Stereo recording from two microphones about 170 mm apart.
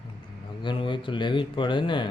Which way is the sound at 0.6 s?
30° left (ahead or behind).